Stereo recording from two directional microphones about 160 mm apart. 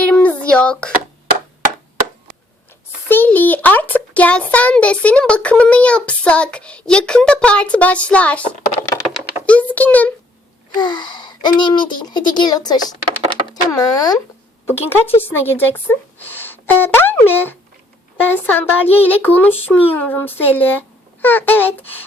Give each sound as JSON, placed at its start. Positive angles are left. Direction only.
{"t": 0.1, "sound": "a sound", "side_deg": 10}
{"t": 3.1, "sound": "a child's voice", "side_deg": 10}
{"t": 9.5, "sound": "a child's voice", "side_deg": 10}
{"t": 10.8, "sound": "a child's voice", "side_deg": 30}